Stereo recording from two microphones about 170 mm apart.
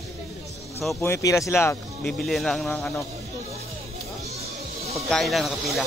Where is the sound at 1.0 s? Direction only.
15° left (ahead or behind).